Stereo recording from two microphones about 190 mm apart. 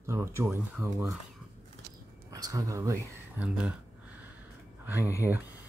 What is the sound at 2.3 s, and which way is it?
Speech, 20° right (ahead or behind).